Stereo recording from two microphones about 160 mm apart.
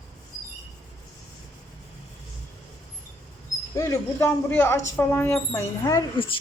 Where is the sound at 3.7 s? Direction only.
15° left (ahead or behind).